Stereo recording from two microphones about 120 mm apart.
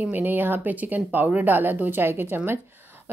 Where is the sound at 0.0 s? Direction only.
15° right (ahead or behind).